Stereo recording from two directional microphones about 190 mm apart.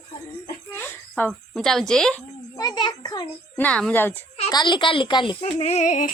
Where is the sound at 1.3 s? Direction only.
Centre (ahead or behind).